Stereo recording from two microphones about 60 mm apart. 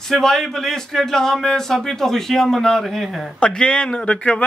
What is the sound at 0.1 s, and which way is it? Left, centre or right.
Speech, centre.